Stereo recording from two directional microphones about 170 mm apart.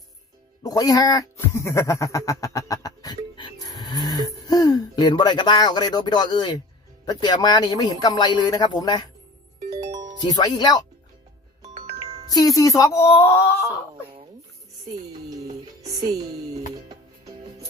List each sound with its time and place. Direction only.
0.6 s speech: 20° left (ahead or behind)
9.6 s music: 40° right (ahead or behind)
10.3 s speech: 25° left (ahead or behind)
11.7 s music: 35° right (ahead or behind)
12.3 s speech: 20° left (ahead or behind)
14.8 s music: 20° right (ahead or behind)
15.9 s speech: 20° right (ahead or behind)